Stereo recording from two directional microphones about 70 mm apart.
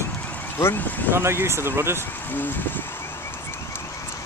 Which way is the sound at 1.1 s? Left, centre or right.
Right.